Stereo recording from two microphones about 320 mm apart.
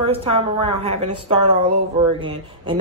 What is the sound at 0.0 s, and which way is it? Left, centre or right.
A woman's voice, centre.